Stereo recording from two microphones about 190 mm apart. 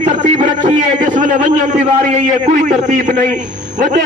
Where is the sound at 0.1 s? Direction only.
40° right (ahead or behind).